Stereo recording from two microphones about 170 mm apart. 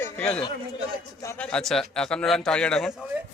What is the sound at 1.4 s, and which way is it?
A man's voice, 5° left (ahead or behind).